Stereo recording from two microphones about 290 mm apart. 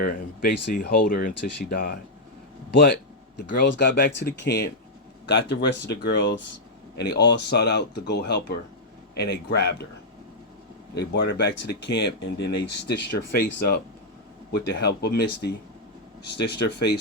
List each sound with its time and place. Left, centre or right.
0.0 s speech: left
10.9 s speech: left
16.6 s speech: left